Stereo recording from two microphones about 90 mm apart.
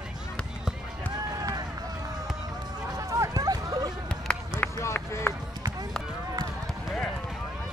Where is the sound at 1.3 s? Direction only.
45° right (ahead or behind).